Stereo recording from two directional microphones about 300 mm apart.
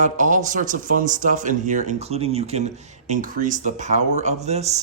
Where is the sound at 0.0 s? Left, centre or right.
Right.